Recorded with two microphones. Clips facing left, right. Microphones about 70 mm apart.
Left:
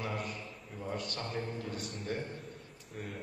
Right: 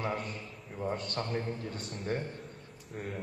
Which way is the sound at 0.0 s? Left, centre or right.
Right.